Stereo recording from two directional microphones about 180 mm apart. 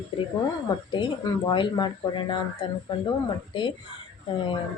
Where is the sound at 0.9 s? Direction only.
25° left (ahead or behind).